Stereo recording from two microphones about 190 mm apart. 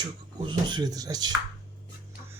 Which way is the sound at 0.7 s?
20° right (ahead or behind).